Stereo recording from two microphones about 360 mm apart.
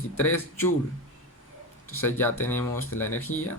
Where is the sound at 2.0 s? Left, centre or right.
Centre.